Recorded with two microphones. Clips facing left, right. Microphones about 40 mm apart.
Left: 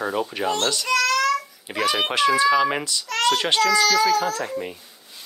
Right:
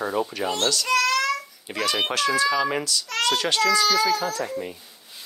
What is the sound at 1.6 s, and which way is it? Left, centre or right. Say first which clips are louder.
Speech: left 2 dB; centre.